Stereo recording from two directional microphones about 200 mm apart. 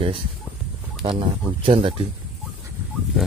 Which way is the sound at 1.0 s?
25° right (ahead or behind).